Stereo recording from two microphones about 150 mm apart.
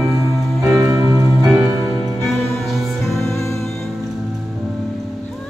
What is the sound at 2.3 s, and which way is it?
Music, 15° left (ahead or behind).